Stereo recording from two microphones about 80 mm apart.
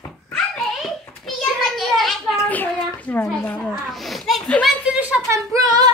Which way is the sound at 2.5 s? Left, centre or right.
Left.